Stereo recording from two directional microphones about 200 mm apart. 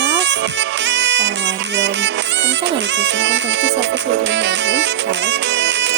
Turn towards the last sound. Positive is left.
turn(degrees=-60)  # may be behind; listen again after turning